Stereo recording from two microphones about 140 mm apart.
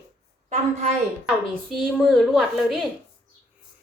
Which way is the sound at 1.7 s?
Centre (ahead or behind).